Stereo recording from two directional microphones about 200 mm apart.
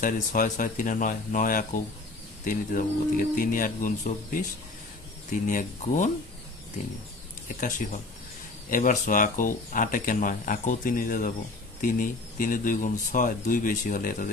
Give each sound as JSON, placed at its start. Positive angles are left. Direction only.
{"t": 0.0, "sound": "speech", "side_deg": 40}
{"t": 5.5, "sound": "speech", "side_deg": 40}
{"t": 7.4, "sound": "speech", "side_deg": 40}